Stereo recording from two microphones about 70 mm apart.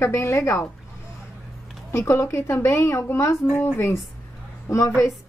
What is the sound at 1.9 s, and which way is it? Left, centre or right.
A woman's voice, left.